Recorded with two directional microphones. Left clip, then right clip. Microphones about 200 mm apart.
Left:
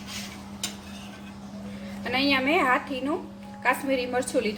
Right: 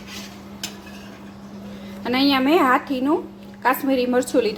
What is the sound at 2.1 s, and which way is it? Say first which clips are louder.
Speech: right 5 dB; 35° right (ahead or behind).